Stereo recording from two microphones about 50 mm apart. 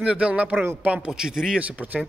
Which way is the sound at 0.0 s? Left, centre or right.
Right.